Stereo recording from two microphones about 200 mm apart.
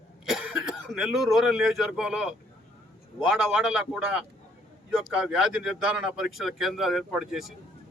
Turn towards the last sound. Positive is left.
turn(degrees=0)  # may be behind; listen again after turning